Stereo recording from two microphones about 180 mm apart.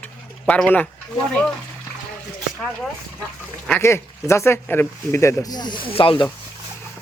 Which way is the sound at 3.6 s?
10° left (ahead or behind).